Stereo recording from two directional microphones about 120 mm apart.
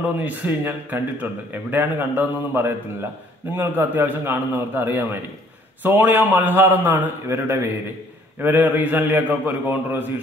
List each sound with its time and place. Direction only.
0.0 s speech: 15° right (ahead or behind)